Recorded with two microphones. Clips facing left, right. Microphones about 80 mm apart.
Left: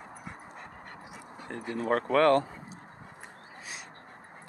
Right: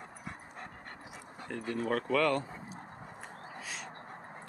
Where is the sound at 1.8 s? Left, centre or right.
Left.